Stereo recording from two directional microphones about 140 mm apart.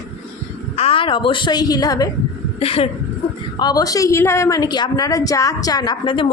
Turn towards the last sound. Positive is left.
turn(degrees=35)  # may be behind; listen again after turning